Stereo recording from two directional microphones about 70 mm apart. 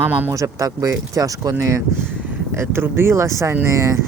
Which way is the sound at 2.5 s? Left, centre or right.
Right.